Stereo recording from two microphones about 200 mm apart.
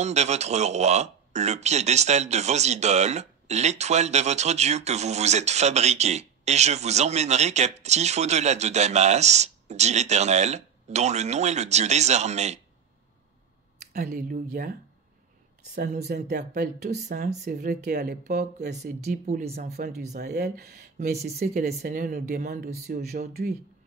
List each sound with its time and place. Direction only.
0.0 s speech: 35° right (ahead or behind)
13.9 s speech: 45° right (ahead or behind)
16.1 s speech: 50° right (ahead or behind)
17.2 s speech: 35° right (ahead or behind); by 18.8 s 55° right (ahead or behind)
19.0 s speech: 35° right (ahead or behind)
20.2 s speech: 55° right (ahead or behind)